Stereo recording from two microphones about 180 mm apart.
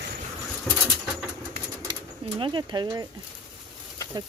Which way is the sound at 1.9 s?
25° right (ahead or behind).